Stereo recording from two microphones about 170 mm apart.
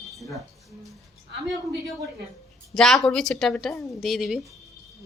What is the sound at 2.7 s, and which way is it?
Speech, 5° left (ahead or behind).